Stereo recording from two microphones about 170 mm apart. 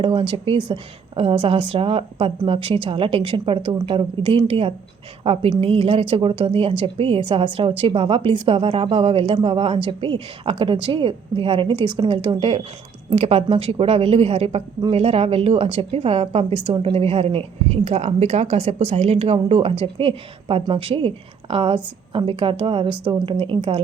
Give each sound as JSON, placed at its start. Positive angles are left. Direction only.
{"t": 0.0, "sound": "a woman's voice", "side_deg": -30}